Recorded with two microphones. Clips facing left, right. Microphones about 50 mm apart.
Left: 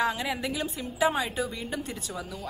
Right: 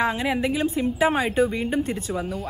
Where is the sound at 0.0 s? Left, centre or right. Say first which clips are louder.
Right 5 dB; right.